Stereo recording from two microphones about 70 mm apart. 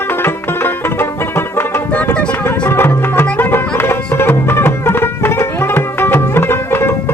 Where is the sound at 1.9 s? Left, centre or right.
Centre.